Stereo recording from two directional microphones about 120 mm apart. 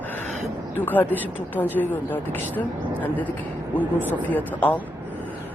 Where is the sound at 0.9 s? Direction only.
15° left (ahead or behind).